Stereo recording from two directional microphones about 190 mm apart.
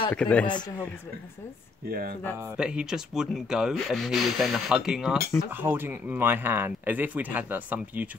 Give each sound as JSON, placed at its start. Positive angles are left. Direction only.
{"t": 0.1, "sound": "a man's voice", "side_deg": 5}
{"t": 1.9, "sound": "speech", "side_deg": -50}
{"t": 2.5, "sound": "speech", "side_deg": -5}